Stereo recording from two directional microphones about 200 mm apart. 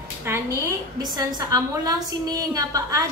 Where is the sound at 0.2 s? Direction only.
15° right (ahead or behind).